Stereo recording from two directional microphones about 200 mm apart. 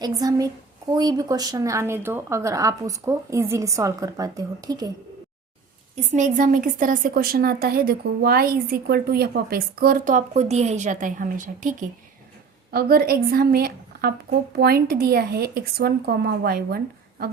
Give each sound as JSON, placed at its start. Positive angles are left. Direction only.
{"t": 0.0, "sound": "speech", "side_deg": -20}
{"t": 6.1, "sound": "a woman's voice", "side_deg": -40}